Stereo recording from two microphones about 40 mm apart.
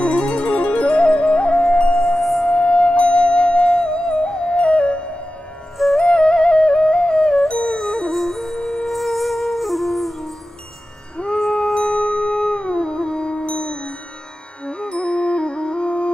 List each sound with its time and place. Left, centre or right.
0.2 s music: left
2.0 s singing bowl: centre
2.4 s music: left
7.2 s music: centre
11.3 s howl: centre
11.9 s music: left